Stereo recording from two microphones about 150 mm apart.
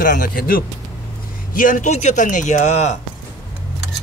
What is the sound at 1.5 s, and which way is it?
A man's voice, 60° left (ahead or behind).